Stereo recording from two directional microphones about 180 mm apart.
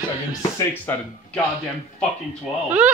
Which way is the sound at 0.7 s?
10° left (ahead or behind).